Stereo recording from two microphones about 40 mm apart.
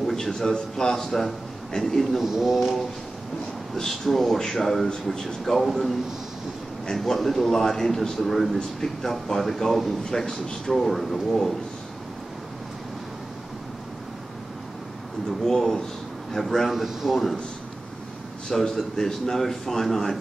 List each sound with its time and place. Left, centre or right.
0.0 s a man's voice: centre
2.1 s speech: centre
3.7 s a man's voice: centre
10.7 s a man's voice: centre
15.4 s a man's voice: centre
18.5 s a man's voice: centre